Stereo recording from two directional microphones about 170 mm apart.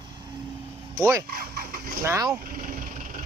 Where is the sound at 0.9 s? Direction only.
20° right (ahead or behind).